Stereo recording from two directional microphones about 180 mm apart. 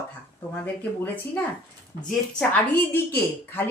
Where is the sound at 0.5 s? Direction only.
10° left (ahead or behind).